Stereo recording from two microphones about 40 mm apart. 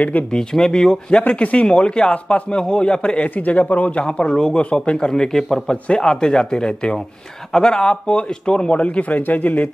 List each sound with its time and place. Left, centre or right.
0.3 s a man's voice: centre
1.2 s a man's voice: left
3.3 s a man's voice: left
4.0 s a man's voice: left
4.6 s a man's voice: left